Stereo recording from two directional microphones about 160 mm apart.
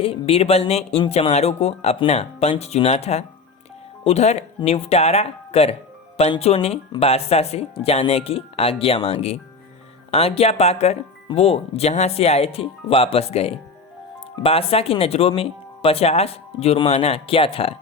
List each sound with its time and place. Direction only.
0.0 s speech: 35° left (ahead or behind)